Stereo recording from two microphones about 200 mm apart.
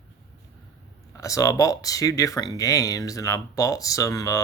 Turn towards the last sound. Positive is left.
turn(degrees=15)  # may be behind; listen again after turning